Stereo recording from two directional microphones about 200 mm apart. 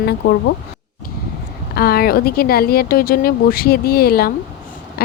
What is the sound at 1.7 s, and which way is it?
A woman's voice, 50° left (ahead or behind).